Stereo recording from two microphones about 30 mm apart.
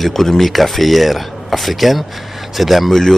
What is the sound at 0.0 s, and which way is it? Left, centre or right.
Speech, centre.